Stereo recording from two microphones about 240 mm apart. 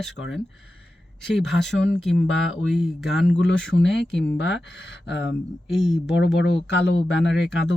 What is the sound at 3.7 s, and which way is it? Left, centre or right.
Speech, left.